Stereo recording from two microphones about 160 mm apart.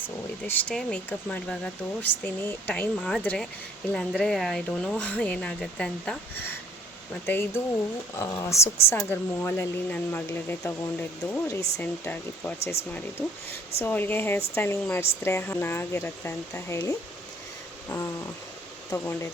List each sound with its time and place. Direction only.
0.4 s speech: 10° left (ahead or behind)
13.8 s speech: 10° left (ahead or behind)
18.9 s speech: 15° left (ahead or behind)